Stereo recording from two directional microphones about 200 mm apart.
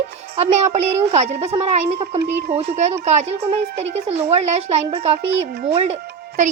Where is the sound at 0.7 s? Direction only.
35° right (ahead or behind).